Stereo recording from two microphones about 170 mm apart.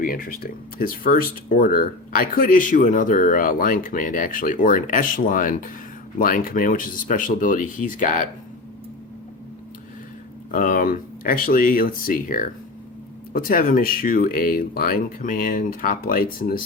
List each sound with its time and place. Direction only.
0.0 s speech: 55° left (ahead or behind)
10.5 s speech: 50° left (ahead or behind)